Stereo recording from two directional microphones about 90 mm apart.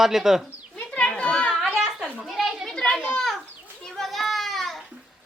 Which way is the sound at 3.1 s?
Centre (ahead or behind).